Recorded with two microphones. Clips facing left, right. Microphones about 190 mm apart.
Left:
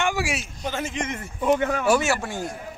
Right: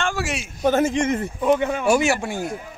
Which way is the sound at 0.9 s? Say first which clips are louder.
Right 9 dB; 35° right (ahead or behind).